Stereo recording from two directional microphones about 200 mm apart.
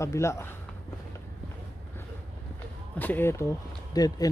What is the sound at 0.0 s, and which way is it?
Speech, 15° left (ahead or behind).